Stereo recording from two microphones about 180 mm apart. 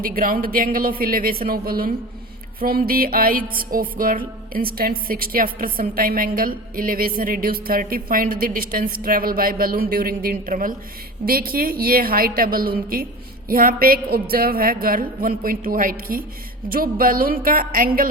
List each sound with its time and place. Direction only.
0.0 s music: 50° right (ahead or behind)
11.3 s a woman's voice: 55° right (ahead or behind)
13.5 s music: 55° right (ahead or behind)